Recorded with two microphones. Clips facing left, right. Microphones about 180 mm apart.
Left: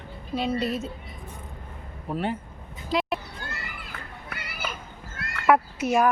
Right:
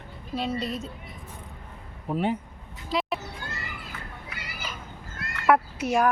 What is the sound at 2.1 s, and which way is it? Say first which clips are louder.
Speech: right 2 dB; 15° right (ahead or behind).